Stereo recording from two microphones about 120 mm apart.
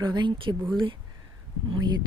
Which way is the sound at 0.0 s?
40° right (ahead or behind).